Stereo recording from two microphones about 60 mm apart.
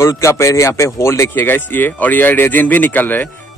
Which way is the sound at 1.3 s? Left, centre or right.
Left.